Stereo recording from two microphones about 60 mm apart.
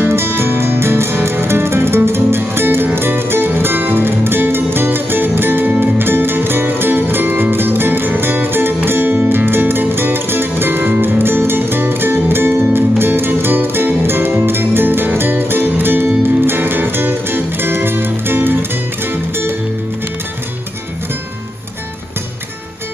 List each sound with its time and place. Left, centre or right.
0.0 s music: right